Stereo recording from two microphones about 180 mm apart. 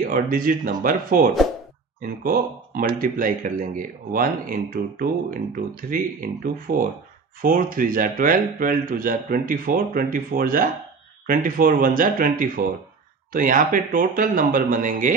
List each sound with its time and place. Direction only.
0.0 s speech: 50° right (ahead or behind)